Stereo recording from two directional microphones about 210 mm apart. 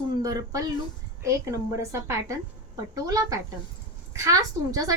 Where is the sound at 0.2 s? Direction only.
15° right (ahead or behind).